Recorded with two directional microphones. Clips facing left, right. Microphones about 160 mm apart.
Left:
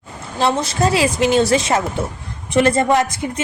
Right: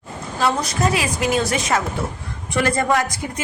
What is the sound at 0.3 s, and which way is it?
Speech, 25° left (ahead or behind).